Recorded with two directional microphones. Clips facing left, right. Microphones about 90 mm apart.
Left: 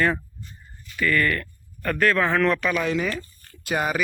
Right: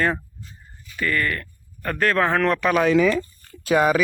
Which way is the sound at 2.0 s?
35° right (ahead or behind).